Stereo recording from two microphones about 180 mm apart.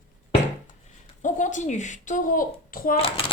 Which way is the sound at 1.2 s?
45° left (ahead or behind).